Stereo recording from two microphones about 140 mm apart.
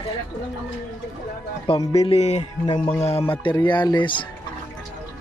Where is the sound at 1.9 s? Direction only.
45° left (ahead or behind).